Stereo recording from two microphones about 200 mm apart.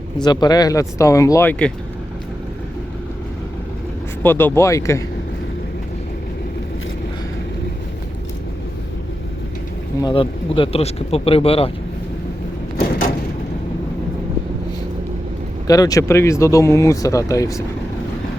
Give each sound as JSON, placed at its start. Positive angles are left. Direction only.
{"t": 0.2, "sound": "speech", "side_deg": 20}
{"t": 4.2, "sound": "speech", "side_deg": 10}
{"t": 10.0, "sound": "speech", "side_deg": 25}
{"t": 15.6, "sound": "speech", "side_deg": 20}